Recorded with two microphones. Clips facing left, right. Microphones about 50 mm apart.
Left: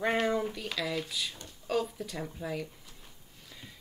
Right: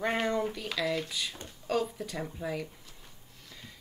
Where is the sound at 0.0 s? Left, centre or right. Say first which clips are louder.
Left 1 dB; centre.